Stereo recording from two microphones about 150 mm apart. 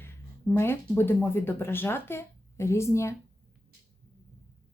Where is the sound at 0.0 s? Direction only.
15° left (ahead or behind).